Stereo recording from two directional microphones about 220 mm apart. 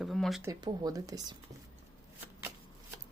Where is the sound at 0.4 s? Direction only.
20° right (ahead or behind).